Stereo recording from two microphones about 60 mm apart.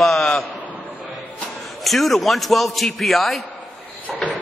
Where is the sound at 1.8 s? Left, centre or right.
Centre.